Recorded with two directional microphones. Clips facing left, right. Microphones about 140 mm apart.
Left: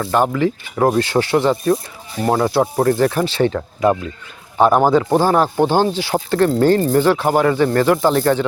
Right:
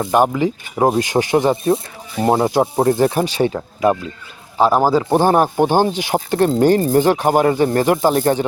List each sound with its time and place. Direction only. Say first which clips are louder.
0.0 s speech: right 1 dB; 15° right (ahead or behind)
5.1 s speech: right 1 dB; 15° right (ahead or behind)